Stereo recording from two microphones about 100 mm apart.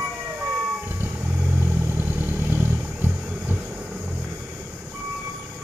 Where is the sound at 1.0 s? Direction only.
20° right (ahead or behind).